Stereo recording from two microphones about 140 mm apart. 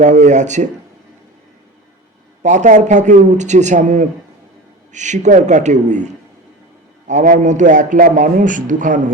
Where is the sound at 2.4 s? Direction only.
60° right (ahead or behind).